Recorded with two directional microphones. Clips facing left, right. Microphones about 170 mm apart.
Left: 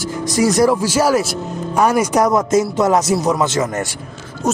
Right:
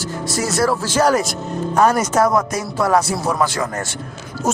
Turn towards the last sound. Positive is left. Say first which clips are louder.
# left 2 dB
turn(degrees=-5)  # may be behind; listen again after turning